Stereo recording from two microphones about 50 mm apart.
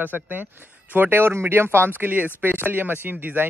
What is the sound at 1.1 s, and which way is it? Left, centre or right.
Speech, right.